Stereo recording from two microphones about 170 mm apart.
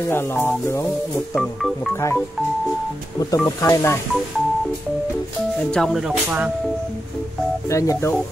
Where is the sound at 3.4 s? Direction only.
20° left (ahead or behind).